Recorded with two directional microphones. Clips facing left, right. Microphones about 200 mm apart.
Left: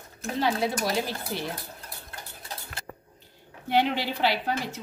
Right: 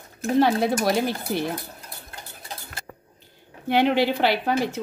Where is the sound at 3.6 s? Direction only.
60° right (ahead or behind).